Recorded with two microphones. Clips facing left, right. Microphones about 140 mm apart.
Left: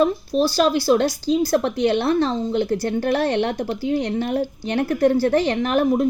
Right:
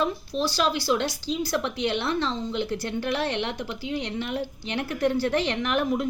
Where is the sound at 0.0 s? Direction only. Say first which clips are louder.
Left 8 dB; 40° left (ahead or behind).